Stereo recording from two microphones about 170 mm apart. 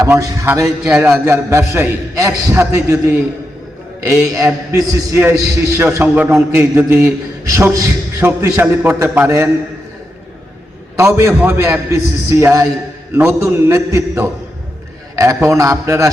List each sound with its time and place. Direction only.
0.0 s a man's voice: 20° right (ahead or behind)
0.8 s a man's voice: 5° right (ahead or behind)
1.2 s a man's voice: 15° right (ahead or behind)
10.9 s a man's voice: 15° right (ahead or behind)